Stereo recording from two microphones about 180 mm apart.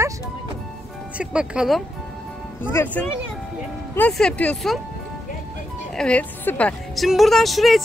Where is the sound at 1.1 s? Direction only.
5° right (ahead or behind).